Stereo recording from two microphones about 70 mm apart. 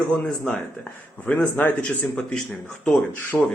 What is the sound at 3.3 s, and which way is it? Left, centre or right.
Speech, left.